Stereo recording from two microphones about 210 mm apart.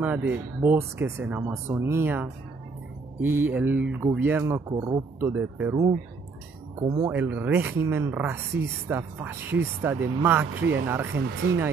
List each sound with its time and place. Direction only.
0.0 s speech: 10° right (ahead or behind)
11.1 s speech: 55° right (ahead or behind)